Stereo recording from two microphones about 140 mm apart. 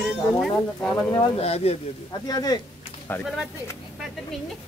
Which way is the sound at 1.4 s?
45° left (ahead or behind).